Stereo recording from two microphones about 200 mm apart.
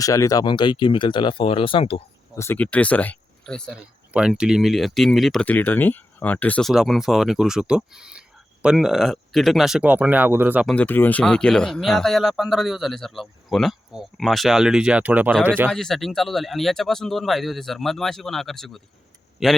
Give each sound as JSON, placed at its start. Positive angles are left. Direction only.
{"t": 0.0, "sound": "speech", "side_deg": 15}
{"t": 2.3, "sound": "speech", "side_deg": 10}
{"t": 10.8, "sound": "speech", "side_deg": 10}
{"t": 15.7, "sound": "speech", "side_deg": 0}